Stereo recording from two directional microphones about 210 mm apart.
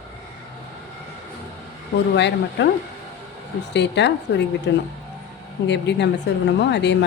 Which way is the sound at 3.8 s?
55° left (ahead or behind).